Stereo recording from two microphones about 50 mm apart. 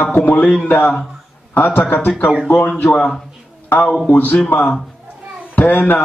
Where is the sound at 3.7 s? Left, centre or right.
Left.